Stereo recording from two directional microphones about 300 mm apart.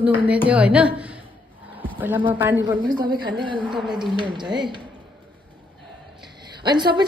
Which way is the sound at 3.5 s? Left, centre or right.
Centre.